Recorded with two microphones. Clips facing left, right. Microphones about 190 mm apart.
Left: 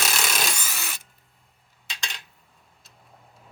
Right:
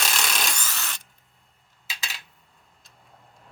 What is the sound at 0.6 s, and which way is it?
Drill, 10° left (ahead or behind).